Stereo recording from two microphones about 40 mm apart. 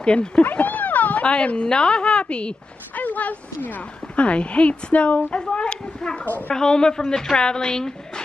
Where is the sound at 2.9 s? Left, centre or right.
Left.